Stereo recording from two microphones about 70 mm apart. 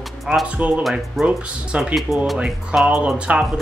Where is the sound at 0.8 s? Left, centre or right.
Centre.